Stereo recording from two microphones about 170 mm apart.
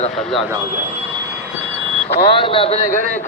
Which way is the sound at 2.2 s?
30° left (ahead or behind).